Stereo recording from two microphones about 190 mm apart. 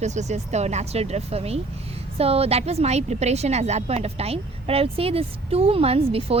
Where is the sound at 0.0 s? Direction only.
35° right (ahead or behind).